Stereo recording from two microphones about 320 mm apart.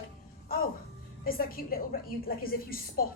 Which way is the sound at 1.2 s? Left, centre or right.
Left.